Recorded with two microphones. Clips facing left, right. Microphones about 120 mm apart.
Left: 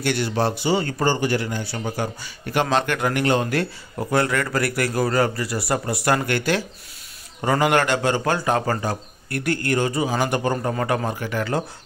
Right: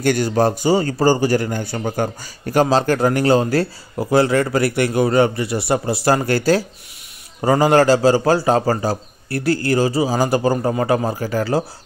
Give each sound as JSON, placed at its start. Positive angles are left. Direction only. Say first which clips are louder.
{"t": 0.0, "sound": "a man's voice", "louder": "right 6 dB", "side_deg": -45}